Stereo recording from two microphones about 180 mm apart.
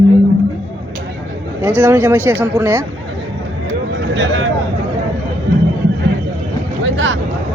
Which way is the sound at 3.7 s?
80° right.